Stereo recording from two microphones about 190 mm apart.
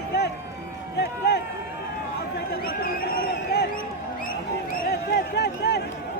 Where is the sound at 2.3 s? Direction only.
50° left (ahead or behind).